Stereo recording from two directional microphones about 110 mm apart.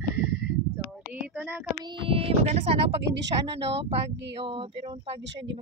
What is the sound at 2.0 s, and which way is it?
Speech, 60° right (ahead or behind).